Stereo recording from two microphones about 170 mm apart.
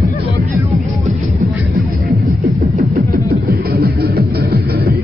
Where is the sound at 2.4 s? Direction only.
65° right (ahead or behind).